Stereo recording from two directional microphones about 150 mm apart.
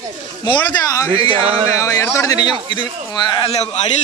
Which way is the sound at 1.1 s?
40° right (ahead or behind).